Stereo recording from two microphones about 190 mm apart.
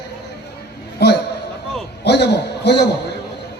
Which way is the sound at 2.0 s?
65° left (ahead or behind).